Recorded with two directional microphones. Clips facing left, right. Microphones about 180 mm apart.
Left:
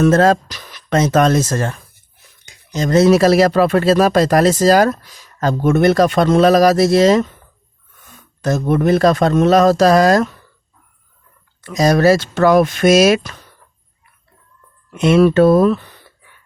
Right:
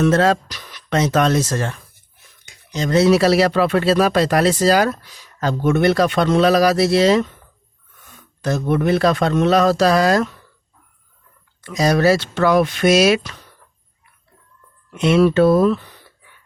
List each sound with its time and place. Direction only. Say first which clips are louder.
0.0 s speech: left 3 dB; 45° left (ahead or behind)
8.4 s speech: left 3 dB; 45° left (ahead or behind)
11.6 s speech: left 3 dB; 45° left (ahead or behind)
14.9 s speech: left 3 dB; 50° left (ahead or behind)